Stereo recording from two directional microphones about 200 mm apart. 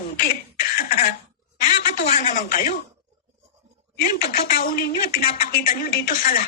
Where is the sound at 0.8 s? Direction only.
45° left (ahead or behind).